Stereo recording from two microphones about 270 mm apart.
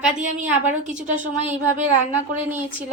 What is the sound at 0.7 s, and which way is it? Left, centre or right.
Speech, right.